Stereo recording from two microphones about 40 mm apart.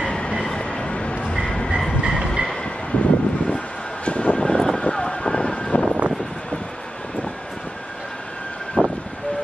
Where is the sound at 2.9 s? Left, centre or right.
Left.